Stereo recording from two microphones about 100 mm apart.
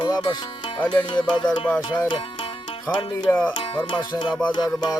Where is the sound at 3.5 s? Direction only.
60° left (ahead or behind).